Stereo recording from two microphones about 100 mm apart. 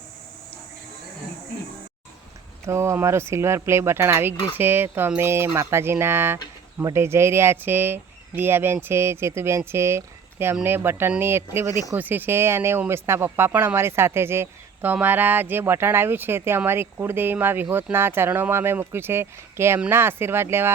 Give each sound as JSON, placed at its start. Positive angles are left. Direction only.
{"t": 2.6, "sound": "speech", "side_deg": -25}